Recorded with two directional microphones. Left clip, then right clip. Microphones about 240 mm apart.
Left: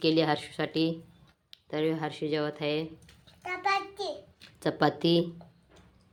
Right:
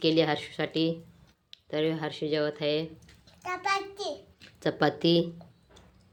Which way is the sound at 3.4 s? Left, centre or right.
Centre.